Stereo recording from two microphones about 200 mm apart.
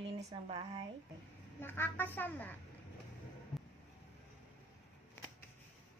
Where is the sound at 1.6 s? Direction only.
10° left (ahead or behind).